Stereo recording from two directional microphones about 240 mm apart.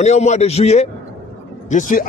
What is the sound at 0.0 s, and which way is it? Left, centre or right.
Speech, left.